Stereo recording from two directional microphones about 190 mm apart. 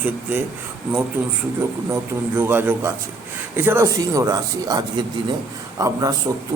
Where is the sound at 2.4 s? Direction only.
10° right (ahead or behind).